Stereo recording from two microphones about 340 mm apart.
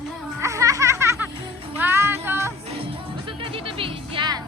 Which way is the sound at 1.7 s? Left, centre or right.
Centre.